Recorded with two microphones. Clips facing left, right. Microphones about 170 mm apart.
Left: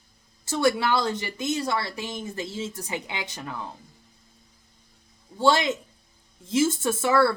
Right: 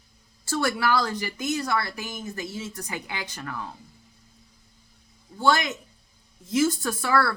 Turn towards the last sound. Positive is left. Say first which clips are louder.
# left 3 dB
turn(degrees=25)  # may be behind; listen again after turning